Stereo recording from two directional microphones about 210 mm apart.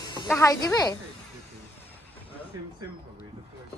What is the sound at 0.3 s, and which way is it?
Speech, 15° left (ahead or behind).